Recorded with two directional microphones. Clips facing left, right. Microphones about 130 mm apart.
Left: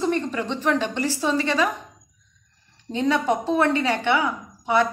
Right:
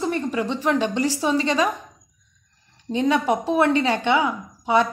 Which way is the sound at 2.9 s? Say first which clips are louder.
Right 1 dB; 15° right (ahead or behind).